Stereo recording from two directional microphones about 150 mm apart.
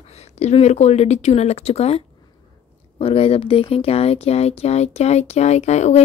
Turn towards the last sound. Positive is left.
turn(degrees=50)  # may be behind; listen again after turning